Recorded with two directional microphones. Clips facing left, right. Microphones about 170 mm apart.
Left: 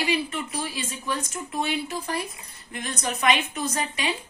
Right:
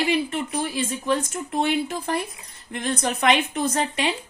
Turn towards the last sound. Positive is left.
turn(degrees=-55)  # may be behind; listen again after turning